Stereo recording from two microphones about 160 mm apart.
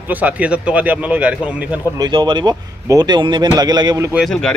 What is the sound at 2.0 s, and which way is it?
Speech, 30° right (ahead or behind).